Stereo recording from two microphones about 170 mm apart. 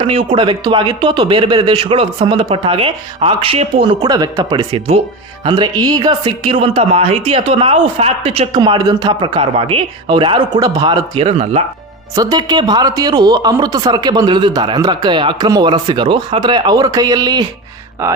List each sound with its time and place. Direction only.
0.0 s speech: 35° right (ahead or behind)
12.1 s speech: 20° right (ahead or behind)